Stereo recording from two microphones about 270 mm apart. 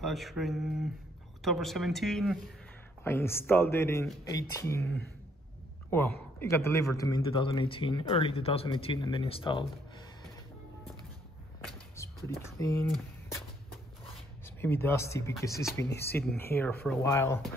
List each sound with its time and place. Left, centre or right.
0.0 s a man's voice: centre
12.0 s a sound: centre
12.5 s speech: centre
14.4 s speech: centre